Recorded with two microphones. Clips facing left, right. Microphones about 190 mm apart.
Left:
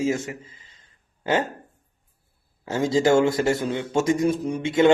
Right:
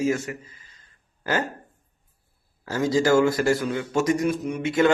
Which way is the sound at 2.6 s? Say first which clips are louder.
Left 1 dB; 25° left (ahead or behind).